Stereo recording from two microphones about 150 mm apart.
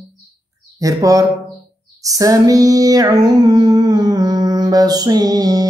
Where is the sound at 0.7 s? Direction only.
20° right (ahead or behind).